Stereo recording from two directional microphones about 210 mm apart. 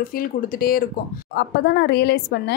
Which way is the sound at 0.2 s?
45° left (ahead or behind).